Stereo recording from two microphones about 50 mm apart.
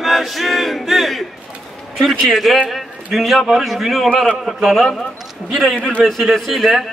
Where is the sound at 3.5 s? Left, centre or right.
Centre.